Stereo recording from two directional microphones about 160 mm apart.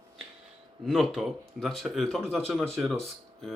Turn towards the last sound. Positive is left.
turn(degrees=0)  # may be behind; listen again after turning